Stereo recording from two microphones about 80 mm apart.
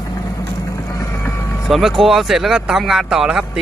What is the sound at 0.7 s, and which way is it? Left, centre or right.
Vehicle, left.